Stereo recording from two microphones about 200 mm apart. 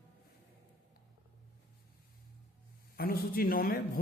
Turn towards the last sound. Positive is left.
turn(degrees=45)  # may be behind; listen again after turning